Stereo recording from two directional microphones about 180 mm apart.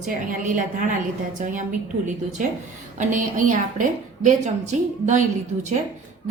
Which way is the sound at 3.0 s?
45° right (ahead or behind).